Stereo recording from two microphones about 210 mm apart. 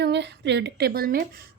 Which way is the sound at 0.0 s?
55° right (ahead or behind).